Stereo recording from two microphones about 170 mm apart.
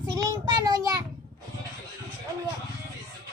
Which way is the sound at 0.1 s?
20° right (ahead or behind).